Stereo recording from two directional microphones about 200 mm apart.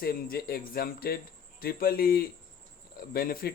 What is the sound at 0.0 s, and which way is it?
Speech, 50° left (ahead or behind).